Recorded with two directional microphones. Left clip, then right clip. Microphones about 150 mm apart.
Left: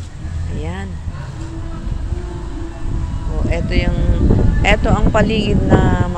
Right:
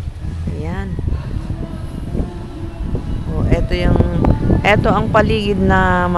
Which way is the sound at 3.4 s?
40° right (ahead or behind).